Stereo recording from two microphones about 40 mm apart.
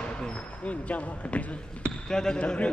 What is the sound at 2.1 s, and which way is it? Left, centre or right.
Speech, centre.